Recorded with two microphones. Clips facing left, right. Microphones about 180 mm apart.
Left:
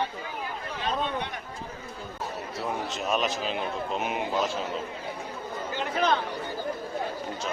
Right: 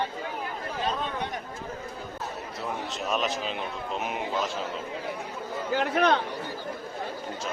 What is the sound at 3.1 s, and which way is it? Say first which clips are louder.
Speech: left 1 dB; centre (ahead or behind).